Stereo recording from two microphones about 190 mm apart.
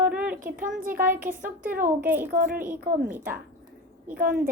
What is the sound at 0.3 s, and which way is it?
A woman's voice, 45° right (ahead or behind).